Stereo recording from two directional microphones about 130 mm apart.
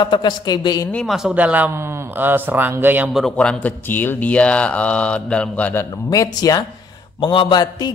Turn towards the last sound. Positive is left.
turn(degrees=30)  # may be behind; listen again after turning